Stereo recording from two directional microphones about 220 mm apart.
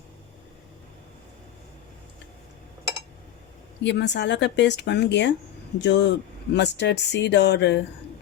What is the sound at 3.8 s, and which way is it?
Speech, 50° left (ahead or behind).